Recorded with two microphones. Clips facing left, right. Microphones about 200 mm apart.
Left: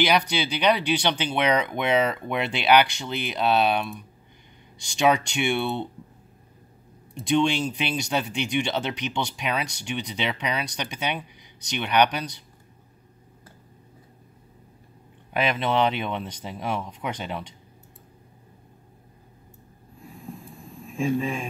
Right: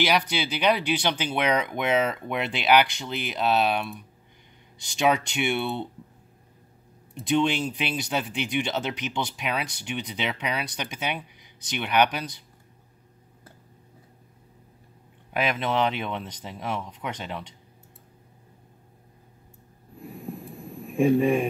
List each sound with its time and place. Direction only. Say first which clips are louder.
0.0 s speech: left 2 dB; 5° right (ahead or behind)
7.2 s speech: left 1 dB; 5° right (ahead or behind)
15.3 s speech: left 2 dB; 5° right (ahead or behind)
20.0 s a sound: right 4 dB; 60° right (ahead or behind)